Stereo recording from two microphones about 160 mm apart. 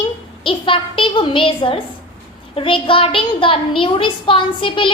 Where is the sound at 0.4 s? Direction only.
35° left (ahead or behind).